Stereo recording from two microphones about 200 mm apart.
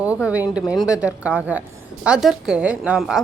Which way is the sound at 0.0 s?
5° right (ahead or behind).